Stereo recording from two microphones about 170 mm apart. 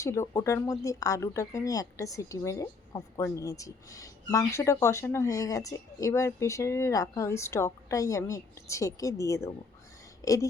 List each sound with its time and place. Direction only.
0.0 s speech: 15° left (ahead or behind)